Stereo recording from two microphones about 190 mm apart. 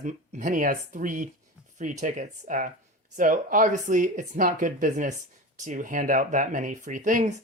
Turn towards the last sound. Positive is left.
turn(degrees=-45)  # may be behind; listen again after turning